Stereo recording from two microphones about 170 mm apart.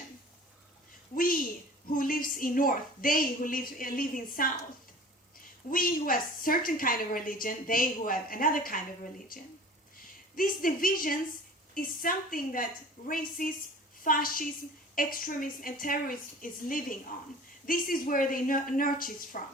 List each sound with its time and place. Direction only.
1.1 s a sound: 55° left (ahead or behind)
1.9 s a woman's voice: 55° left (ahead or behind)
5.7 s a woman's voice: 55° left (ahead or behind)
10.3 s a woman's voice: 55° left (ahead or behind)